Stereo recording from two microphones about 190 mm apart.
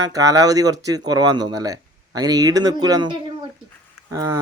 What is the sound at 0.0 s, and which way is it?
A man's voice, 20° right (ahead or behind).